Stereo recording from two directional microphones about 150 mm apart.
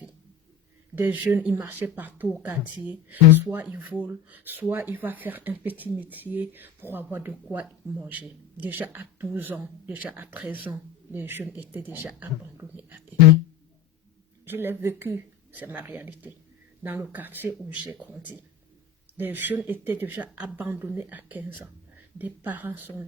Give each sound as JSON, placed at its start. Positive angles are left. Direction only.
{"t": 0.9, "sound": "speech", "side_deg": -10}
{"t": 14.4, "sound": "speech", "side_deg": -15}